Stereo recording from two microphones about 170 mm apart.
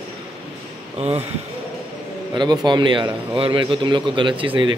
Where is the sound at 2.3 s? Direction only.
25° right (ahead or behind).